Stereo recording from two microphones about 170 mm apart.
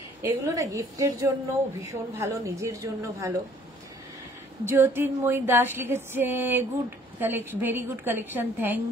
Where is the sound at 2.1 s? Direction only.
15° right (ahead or behind).